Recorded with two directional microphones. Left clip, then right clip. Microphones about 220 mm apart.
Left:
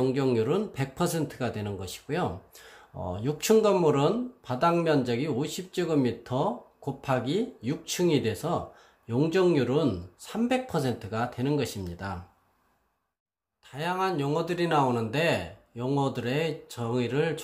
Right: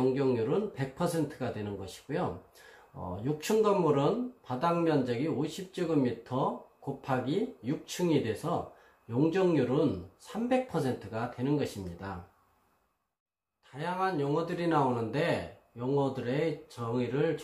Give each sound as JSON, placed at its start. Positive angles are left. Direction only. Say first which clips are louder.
{"t": 0.0, "sound": "speech", "louder": "left 3 dB", "side_deg": 50}
{"t": 13.7, "sound": "speech", "louder": "left 3 dB", "side_deg": 45}